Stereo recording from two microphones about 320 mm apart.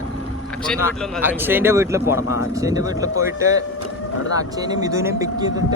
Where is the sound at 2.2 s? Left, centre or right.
Left.